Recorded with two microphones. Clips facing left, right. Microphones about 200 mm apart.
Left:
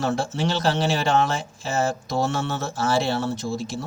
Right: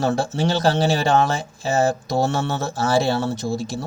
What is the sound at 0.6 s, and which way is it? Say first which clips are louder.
Speech: right 4 dB; 40° right (ahead or behind).